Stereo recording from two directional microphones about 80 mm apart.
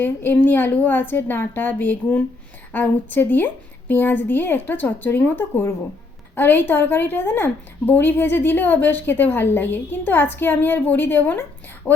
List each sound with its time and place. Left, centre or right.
0.0 s a woman's voice: left